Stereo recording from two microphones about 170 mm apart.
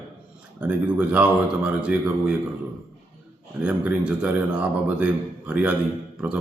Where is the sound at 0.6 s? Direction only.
5° right (ahead or behind).